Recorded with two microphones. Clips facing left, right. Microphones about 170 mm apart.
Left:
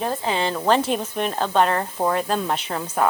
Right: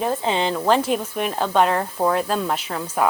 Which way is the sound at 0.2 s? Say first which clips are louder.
Right 2 dB; 20° right (ahead or behind).